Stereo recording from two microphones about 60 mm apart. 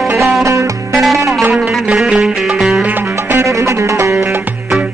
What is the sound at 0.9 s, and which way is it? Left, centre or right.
Music, centre.